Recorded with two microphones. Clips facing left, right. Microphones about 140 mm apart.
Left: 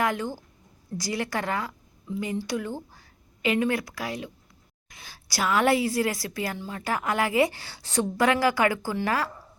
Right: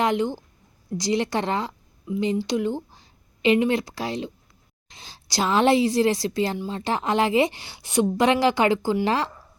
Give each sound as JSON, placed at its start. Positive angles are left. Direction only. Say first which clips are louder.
{"t": 0.0, "sound": "a woman's voice", "louder": "right 5 dB", "side_deg": -20}